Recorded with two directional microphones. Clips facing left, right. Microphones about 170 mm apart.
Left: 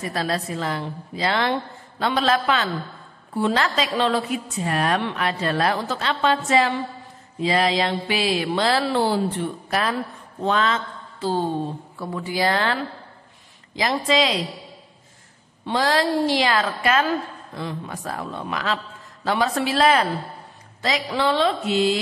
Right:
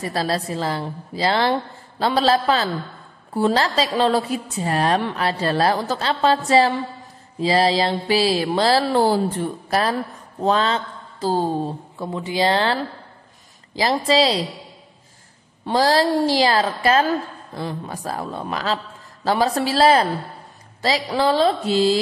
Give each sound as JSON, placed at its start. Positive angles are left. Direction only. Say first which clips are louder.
{"t": 0.0, "sound": "a woman's voice", "louder": "right 2 dB", "side_deg": -35}
{"t": 12.0, "sound": "speech", "louder": "right 2 dB", "side_deg": -20}
{"t": 13.7, "sound": "a woman's voice", "louder": "right 3 dB", "side_deg": -35}
{"t": 15.6, "sound": "a woman's voice", "louder": "right 3 dB", "side_deg": -35}